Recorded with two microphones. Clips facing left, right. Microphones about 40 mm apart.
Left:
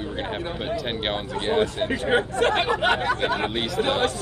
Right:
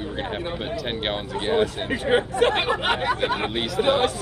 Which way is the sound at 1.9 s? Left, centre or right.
Centre.